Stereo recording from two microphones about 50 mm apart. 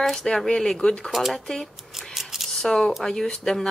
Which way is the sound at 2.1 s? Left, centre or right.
Centre.